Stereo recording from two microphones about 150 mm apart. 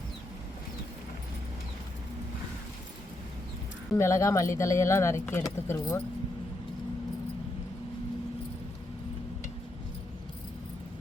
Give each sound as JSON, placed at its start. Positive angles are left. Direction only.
{"t": 3.9, "sound": "speech", "side_deg": 20}